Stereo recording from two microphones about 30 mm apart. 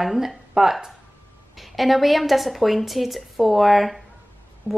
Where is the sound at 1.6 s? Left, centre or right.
Centre.